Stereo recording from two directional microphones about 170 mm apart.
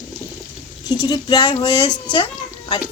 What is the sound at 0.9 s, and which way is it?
Speech, 25° left (ahead or behind).